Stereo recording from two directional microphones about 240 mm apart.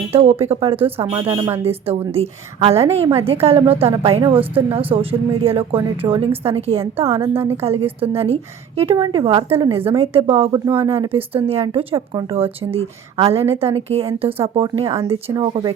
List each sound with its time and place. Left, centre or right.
0.1 s a woman's voice: right
7.3 s a woman's voice: centre
7.6 s a woman's voice: right